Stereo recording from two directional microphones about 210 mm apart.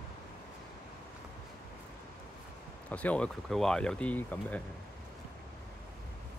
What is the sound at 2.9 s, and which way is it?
Speech, 5° left (ahead or behind).